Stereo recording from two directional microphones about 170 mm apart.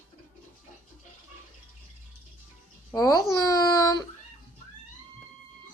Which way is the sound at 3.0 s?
20° left (ahead or behind).